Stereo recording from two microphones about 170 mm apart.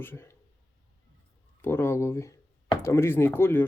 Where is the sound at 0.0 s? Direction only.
15° left (ahead or behind).